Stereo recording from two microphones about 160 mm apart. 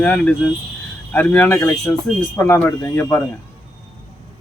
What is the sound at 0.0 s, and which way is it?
Speech, 10° left (ahead or behind).